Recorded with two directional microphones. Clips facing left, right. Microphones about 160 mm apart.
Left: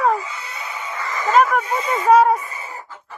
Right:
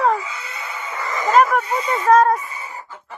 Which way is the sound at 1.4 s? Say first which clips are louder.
Right 1 dB; centre (ahead or behind).